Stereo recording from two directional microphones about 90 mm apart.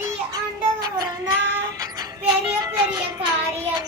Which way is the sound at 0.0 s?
45° right (ahead or behind).